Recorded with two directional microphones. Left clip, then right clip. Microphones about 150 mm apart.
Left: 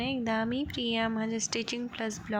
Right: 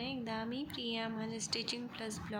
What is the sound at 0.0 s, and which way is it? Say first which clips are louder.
A woman's voice: left 9 dB; 40° left (ahead or behind).